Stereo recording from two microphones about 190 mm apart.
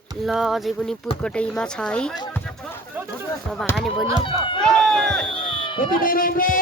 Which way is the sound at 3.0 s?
10° right (ahead or behind).